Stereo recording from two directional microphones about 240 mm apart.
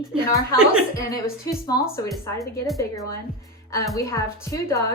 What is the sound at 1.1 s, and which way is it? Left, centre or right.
A woman's voice, centre.